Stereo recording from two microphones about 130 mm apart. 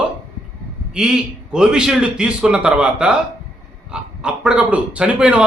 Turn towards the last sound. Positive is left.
turn(degrees=-10)  # may be behind; listen again after turning